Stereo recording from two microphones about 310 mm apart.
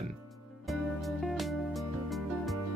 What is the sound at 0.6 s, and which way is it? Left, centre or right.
Music, centre.